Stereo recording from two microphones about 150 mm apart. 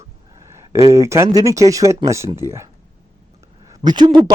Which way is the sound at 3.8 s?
30° right (ahead or behind).